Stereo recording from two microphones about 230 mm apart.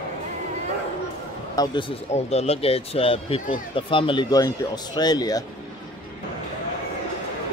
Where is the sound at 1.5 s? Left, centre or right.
Centre.